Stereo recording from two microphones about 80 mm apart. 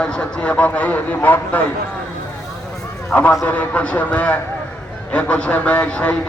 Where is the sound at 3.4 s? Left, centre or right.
Centre.